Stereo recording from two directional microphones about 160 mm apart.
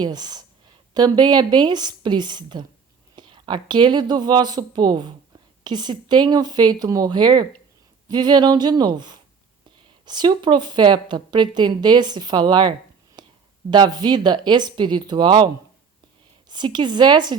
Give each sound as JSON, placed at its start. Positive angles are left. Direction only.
{"t": 0.0, "sound": "speech", "side_deg": -25}
{"t": 13.2, "sound": "whispering", "side_deg": -25}
{"t": 13.7, "sound": "speech", "side_deg": -25}
{"t": 16.5, "sound": "speech", "side_deg": -30}